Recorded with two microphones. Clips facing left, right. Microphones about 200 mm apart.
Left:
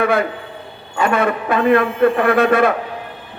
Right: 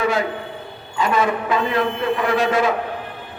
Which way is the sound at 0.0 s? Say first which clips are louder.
Left 3 dB; 60° left (ahead or behind).